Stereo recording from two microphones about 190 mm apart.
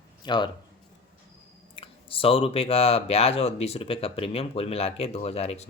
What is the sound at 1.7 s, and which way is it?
Speech, 30° left (ahead or behind).